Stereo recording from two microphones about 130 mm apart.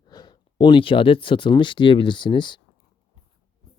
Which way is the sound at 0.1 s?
35° left (ahead or behind).